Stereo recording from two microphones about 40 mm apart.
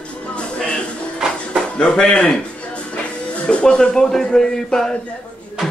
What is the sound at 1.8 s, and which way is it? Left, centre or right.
Speech, left.